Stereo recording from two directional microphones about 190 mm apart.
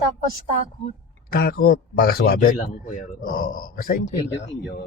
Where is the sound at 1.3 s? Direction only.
55° left (ahead or behind).